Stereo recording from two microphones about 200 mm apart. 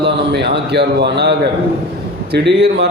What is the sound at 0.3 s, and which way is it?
A man's voice, 55° right (ahead or behind).